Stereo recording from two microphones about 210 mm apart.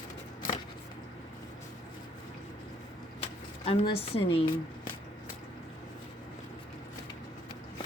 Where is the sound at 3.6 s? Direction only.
30° left (ahead or behind).